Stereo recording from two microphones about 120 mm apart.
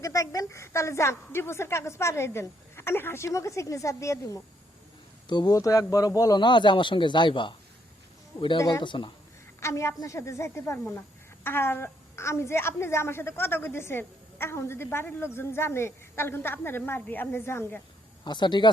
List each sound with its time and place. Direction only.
0.0 s a woman's voice: 25° left (ahead or behind)
9.6 s a woman's voice: 25° left (ahead or behind)
18.3 s speech: 40° left (ahead or behind)